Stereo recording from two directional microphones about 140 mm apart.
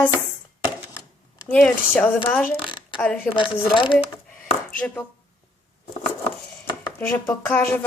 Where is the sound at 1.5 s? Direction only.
10° left (ahead or behind).